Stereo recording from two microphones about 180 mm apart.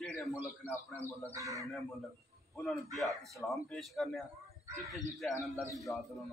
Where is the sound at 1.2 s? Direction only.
15° right (ahead or behind).